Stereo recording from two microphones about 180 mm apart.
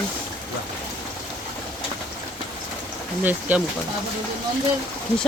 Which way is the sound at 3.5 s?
10° right (ahead or behind).